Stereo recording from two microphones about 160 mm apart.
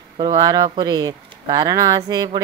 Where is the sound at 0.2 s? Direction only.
25° right (ahead or behind).